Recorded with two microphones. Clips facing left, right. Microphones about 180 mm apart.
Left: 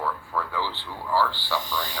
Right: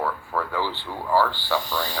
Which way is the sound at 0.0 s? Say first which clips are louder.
Right 3 dB; 45° right (ahead or behind).